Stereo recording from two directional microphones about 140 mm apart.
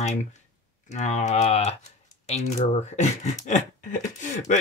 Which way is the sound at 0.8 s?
55° left (ahead or behind).